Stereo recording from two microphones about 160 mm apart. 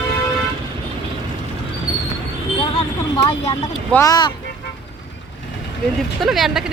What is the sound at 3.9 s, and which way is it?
Speech, 20° left (ahead or behind).